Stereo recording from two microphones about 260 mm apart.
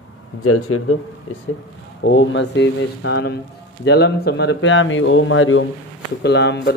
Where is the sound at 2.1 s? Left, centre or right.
Left.